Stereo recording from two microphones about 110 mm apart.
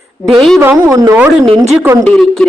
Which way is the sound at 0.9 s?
30° right (ahead or behind).